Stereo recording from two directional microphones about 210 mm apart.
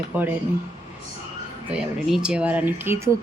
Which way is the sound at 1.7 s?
5° right (ahead or behind).